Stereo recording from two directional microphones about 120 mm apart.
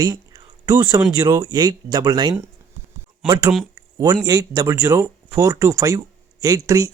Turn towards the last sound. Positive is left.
turn(degrees=-30)  # may be behind; listen again after turning